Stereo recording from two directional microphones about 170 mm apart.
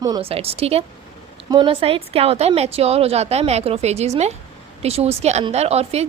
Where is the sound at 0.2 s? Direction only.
35° right (ahead or behind).